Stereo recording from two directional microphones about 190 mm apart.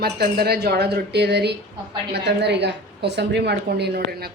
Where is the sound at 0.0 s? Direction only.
55° right (ahead or behind).